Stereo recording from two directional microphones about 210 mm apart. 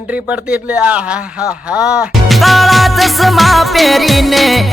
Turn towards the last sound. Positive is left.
turn(degrees=0)  # may be behind; listen again after turning